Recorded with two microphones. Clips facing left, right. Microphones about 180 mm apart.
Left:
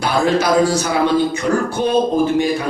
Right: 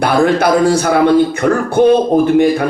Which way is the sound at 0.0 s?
55° right (ahead or behind).